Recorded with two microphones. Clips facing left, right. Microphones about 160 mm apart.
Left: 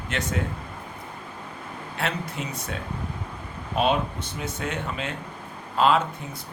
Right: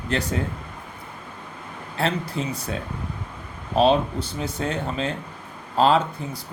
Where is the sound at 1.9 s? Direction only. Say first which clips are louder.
Right 5 dB; 35° right (ahead or behind).